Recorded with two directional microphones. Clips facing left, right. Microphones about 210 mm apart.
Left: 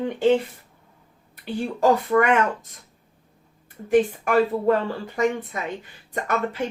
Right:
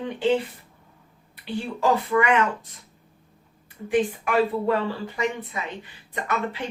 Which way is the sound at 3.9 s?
45° left (ahead or behind).